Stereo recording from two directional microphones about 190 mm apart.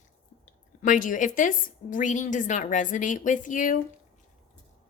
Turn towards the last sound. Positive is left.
turn(degrees=45)  # may be behind; listen again after turning